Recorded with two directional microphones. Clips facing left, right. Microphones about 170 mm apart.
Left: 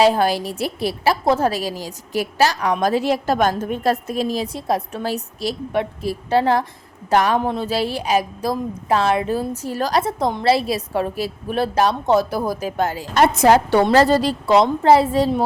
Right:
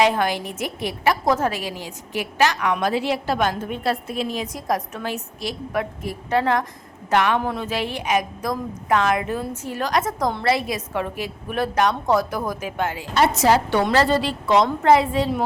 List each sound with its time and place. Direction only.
0.0 s a woman's voice: 35° left (ahead or behind); by 13.6 s 50° left (ahead or behind)
13.7 s a woman's voice: 40° left (ahead or behind)